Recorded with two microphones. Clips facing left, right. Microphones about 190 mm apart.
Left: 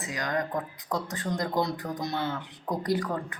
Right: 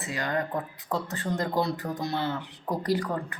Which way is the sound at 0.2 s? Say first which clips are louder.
Even; 5° right (ahead or behind).